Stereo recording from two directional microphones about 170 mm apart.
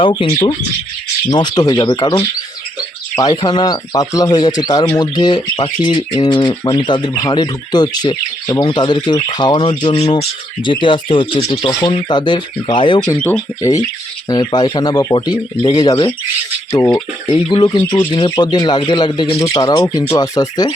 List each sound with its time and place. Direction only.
0.0 s speech: 30° left (ahead or behind)
1.3 s speech: 25° left (ahead or behind)
13.1 s speech: 5° left (ahead or behind)
13.6 s speech: 20° left (ahead or behind)